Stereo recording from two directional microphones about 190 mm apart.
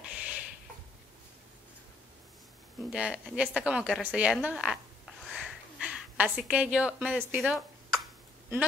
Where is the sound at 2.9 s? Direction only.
5° right (ahead or behind).